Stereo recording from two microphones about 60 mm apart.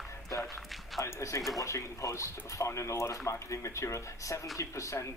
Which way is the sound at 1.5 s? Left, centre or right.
Left.